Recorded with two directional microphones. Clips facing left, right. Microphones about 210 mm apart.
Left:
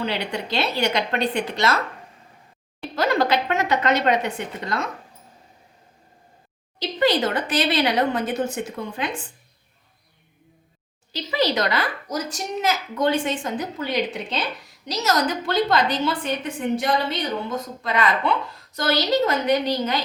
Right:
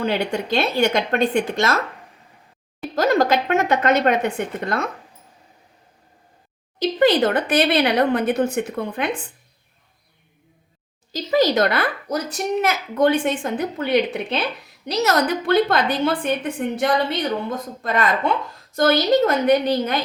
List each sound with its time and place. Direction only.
0.0 s speech: 45° right (ahead or behind)
2.9 s speech: 45° right (ahead or behind)
6.7 s speech: 55° right (ahead or behind)
11.1 s speech: 45° right (ahead or behind)